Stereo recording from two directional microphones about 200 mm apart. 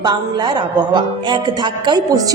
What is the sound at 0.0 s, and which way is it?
A woman's voice, 20° right (ahead or behind).